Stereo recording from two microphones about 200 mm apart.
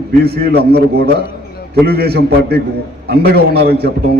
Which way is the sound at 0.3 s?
50° right (ahead or behind).